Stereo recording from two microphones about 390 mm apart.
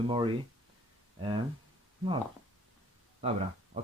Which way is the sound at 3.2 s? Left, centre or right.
Centre.